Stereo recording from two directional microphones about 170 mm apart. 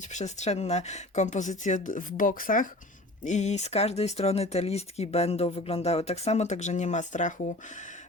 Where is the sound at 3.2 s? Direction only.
45° left (ahead or behind).